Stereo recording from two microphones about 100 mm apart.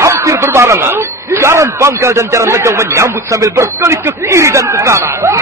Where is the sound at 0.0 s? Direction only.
30° right (ahead or behind).